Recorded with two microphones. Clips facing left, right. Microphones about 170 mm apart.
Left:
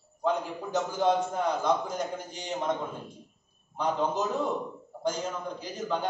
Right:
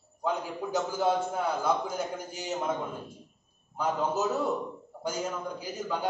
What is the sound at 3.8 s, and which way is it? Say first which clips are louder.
A man's voice: even; 5° right (ahead or behind).